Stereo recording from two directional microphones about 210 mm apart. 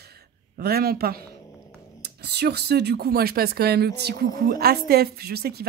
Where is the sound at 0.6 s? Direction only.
45° right (ahead or behind).